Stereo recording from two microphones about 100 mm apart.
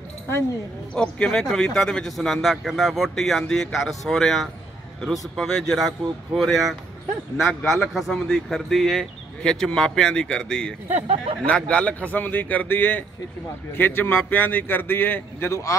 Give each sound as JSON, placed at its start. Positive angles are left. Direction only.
{"t": 0.9, "sound": "a man's voice", "side_deg": 10}